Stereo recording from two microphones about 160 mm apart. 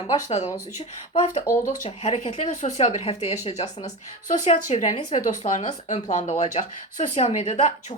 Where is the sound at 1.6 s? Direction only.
50° left (ahead or behind).